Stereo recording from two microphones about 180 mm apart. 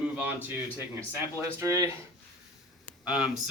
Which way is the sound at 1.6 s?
15° right (ahead or behind).